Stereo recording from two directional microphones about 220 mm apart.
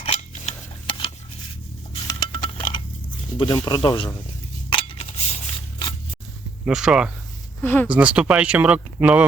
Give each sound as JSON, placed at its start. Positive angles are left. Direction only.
{"t": 0.0, "sound": "cutlery", "side_deg": 25}
{"t": 2.0, "sound": "a sound", "side_deg": 15}
{"t": 3.3, "sound": "speech", "side_deg": 20}
{"t": 4.7, "sound": "a sound", "side_deg": 25}
{"t": 6.7, "sound": "speech", "side_deg": -5}
{"t": 7.6, "sound": "speech", "side_deg": 10}
{"t": 7.9, "sound": "speech", "side_deg": -5}